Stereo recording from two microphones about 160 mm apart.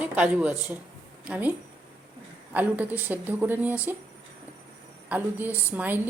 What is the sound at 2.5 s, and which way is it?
Speech, 10° right (ahead or behind).